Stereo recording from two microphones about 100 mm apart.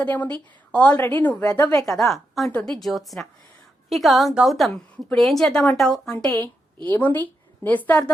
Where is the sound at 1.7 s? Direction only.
5° left (ahead or behind).